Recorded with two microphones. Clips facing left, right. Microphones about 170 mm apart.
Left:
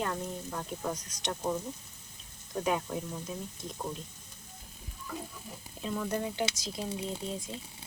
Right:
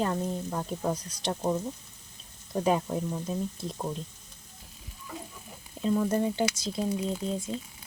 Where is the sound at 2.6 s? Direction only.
30° right (ahead or behind).